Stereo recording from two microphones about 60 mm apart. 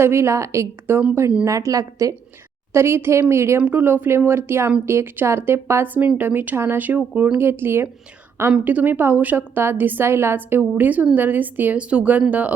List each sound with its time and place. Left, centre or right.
0.0 s a woman's voice: right
1.5 s a woman's voice: right
2.7 s a woman's voice: right
3.6 s a woman's voice: right
5.8 s a woman's voice: right
7.3 s a woman's voice: right
8.5 s a woman's voice: right
10.1 s a woman's voice: right
11.8 s speech: centre